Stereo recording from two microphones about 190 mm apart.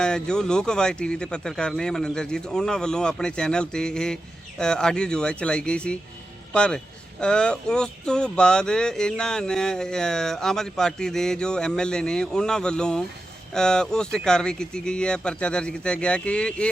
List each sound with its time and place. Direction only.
0.0 s speech: 5° left (ahead or behind)